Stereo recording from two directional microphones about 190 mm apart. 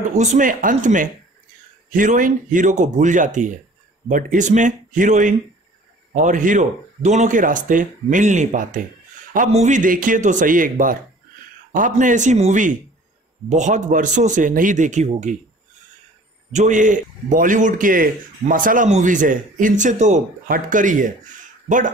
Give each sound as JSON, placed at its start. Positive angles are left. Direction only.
{"t": 0.1, "sound": "a man's voice", "side_deg": -40}
{"t": 16.5, "sound": "a man's voice", "side_deg": -40}